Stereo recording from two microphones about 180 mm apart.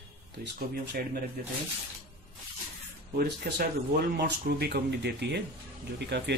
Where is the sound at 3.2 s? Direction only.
60° right (ahead or behind).